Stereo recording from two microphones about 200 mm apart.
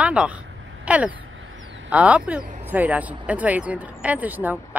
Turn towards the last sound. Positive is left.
turn(degrees=-10)  # may be behind; listen again after turning